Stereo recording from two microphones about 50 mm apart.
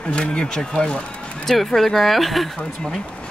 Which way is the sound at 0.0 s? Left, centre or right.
Left.